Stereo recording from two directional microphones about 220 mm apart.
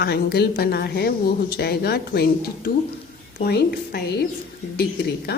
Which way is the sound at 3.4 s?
45° left (ahead or behind).